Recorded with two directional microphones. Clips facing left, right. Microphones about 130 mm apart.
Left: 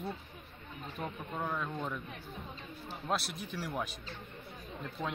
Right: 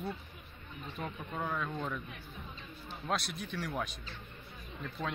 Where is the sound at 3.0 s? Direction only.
5° left (ahead or behind).